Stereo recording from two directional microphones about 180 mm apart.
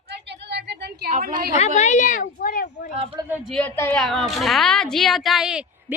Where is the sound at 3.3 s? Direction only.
Centre (ahead or behind).